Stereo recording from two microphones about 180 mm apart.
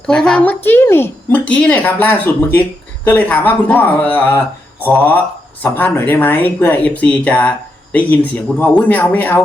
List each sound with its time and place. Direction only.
0.1 s speech: 5° left (ahead or behind)